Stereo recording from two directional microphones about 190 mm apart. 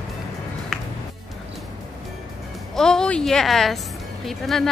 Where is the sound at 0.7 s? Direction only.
Centre (ahead or behind).